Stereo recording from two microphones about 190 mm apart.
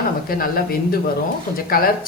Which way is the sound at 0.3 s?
50° left (ahead or behind).